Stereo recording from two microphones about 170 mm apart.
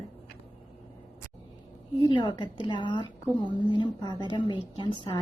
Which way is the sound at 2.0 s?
25° left (ahead or behind).